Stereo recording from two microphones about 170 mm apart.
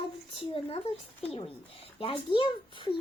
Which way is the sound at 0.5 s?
35° left (ahead or behind).